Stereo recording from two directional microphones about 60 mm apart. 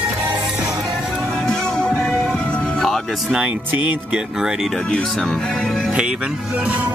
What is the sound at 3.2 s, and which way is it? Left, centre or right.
Speech, centre.